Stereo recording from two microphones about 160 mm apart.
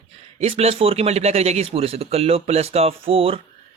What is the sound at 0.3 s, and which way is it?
Speech, 40° right (ahead or behind).